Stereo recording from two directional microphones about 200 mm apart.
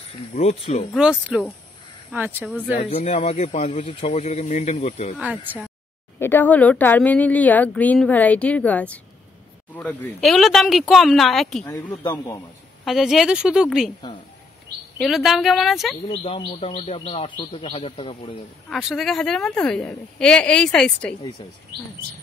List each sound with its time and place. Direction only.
0.3 s speech: 30° left (ahead or behind)
0.9 s a woman's voice: 5° right (ahead or behind)
2.8 s speech: 35° left (ahead or behind)
5.1 s a woman's voice: 5° right (ahead or behind)
6.1 s a woman's voice: 10° left (ahead or behind)
11.6 s speech: 15° left (ahead or behind)
12.8 s a woman's voice: centre (ahead or behind)
15.0 s a woman's voice: centre (ahead or behind)
16.1 s speech: 30° left (ahead or behind)
18.7 s a woman's voice: centre (ahead or behind)